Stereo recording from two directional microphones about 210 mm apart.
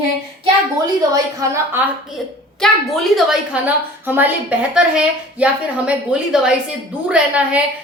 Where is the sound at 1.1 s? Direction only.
15° right (ahead or behind).